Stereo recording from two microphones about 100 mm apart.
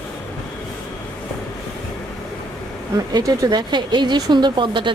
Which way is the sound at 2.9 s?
40° right (ahead or behind).